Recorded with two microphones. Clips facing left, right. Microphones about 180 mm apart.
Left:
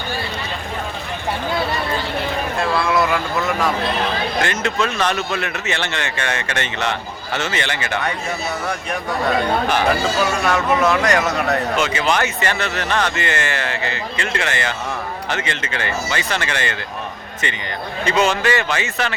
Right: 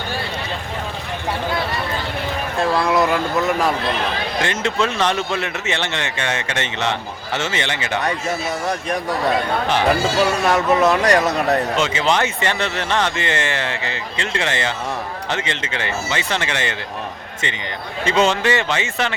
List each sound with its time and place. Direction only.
2.7 s speech: 35° right (ahead or behind)
4.4 s speech: 25° right (ahead or behind)
9.6 s speech: 30° right (ahead or behind)
18.0 s speech: 25° right (ahead or behind)